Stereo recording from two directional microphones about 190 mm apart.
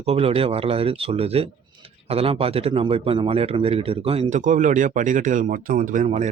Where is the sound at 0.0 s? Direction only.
30° right (ahead or behind).